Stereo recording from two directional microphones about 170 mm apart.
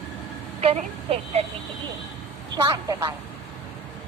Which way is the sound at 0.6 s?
35° right (ahead or behind).